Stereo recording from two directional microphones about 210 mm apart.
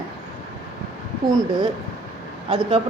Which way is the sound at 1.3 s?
15° right (ahead or behind).